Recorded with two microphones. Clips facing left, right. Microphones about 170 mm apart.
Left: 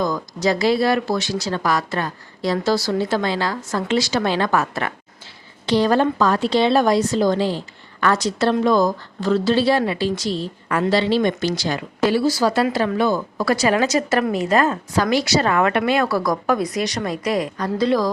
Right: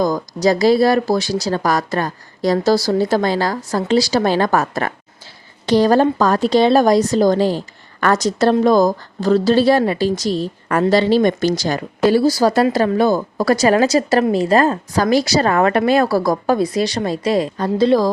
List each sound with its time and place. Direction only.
0.0 s a woman's voice: 40° right (ahead or behind)